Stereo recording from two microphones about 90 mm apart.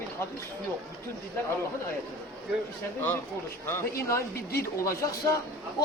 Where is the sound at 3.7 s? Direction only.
30° left (ahead or behind).